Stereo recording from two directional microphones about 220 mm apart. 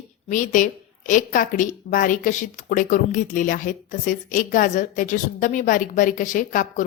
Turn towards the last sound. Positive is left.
turn(degrees=35)  # may be behind; listen again after turning